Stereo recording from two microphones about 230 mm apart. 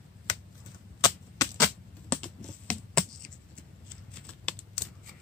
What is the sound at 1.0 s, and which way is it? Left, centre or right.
Typewriter, centre.